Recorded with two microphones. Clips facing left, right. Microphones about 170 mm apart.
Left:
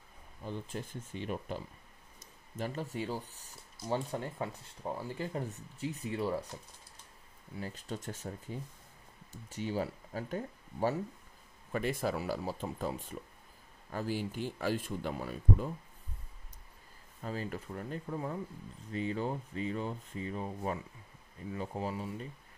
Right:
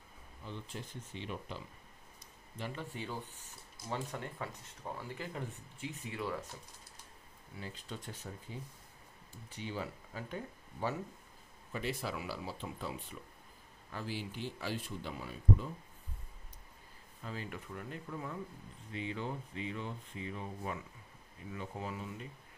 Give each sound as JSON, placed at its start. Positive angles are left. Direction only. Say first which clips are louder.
{"t": 0.5, "sound": "speech", "louder": "left 5 dB", "side_deg": 45}
{"t": 7.6, "sound": "speech", "louder": "left 5 dB", "side_deg": 45}
{"t": 17.2, "sound": "speech", "louder": "left 5 dB", "side_deg": 40}